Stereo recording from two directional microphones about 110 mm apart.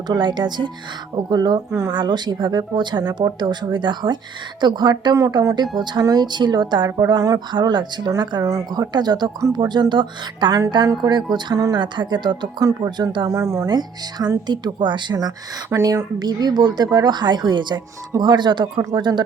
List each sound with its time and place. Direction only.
0.1 s speech: 40° right (ahead or behind)
13.3 s speech: 25° right (ahead or behind)
13.7 s speech: 40° right (ahead or behind)
15.7 s speech: 30° right (ahead or behind)